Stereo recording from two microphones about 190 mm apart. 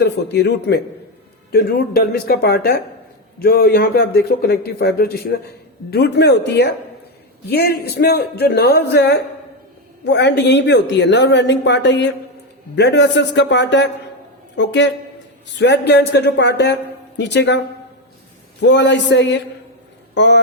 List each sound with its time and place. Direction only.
0.0 s a man's voice: 65° left (ahead or behind)
18.6 s speech: 70° left (ahead or behind)